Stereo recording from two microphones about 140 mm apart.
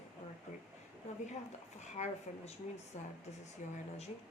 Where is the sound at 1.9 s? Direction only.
55° left (ahead or behind).